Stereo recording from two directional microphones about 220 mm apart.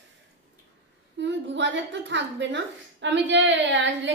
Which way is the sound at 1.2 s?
55° right (ahead or behind).